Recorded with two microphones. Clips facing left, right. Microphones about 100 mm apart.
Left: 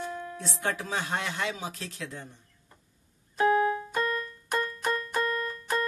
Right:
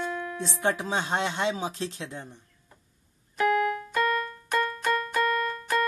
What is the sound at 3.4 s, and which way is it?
Keyboard, 25° left (ahead or behind).